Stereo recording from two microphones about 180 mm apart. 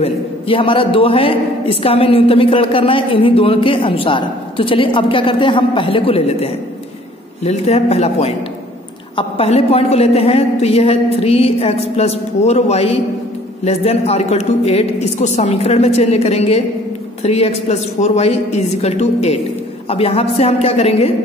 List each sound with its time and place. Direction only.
0.0 s a man's voice: 30° left (ahead or behind)